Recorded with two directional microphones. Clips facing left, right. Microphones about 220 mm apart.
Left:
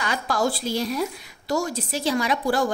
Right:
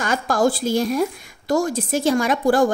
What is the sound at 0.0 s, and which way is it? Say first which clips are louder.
A woman's voice: right 5 dB; 50° right (ahead or behind).